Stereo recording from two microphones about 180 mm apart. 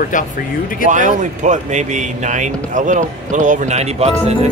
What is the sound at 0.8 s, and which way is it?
Speech, 45° right (ahead or behind).